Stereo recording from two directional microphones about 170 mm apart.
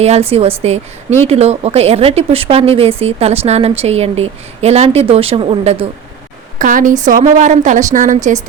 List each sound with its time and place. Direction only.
0.0 s a woman's voice: 40° right (ahead or behind)
6.6 s a woman's voice: 50° right (ahead or behind)